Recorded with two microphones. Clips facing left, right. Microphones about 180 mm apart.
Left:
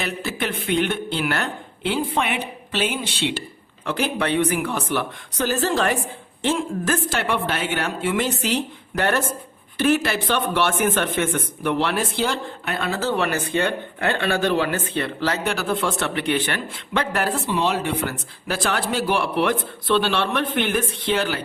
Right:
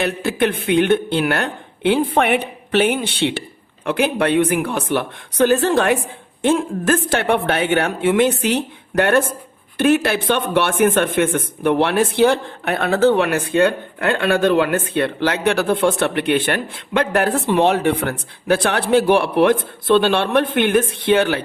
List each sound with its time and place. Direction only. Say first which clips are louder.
0.0 s speech: right 8 dB; 55° right (ahead or behind)